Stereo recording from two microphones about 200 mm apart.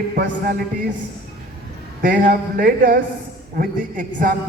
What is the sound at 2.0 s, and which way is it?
A man's voice, 45° right (ahead or behind).